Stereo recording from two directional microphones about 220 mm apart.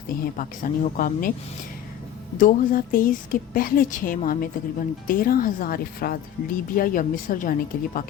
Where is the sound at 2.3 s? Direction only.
40° left (ahead or behind).